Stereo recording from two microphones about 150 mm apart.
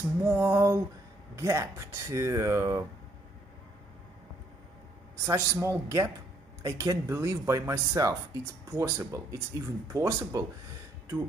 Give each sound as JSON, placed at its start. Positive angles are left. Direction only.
{"t": 0.2, "sound": "a sound", "side_deg": -15}
{"t": 1.3, "sound": "speech", "side_deg": -20}
{"t": 5.2, "sound": "speech", "side_deg": -20}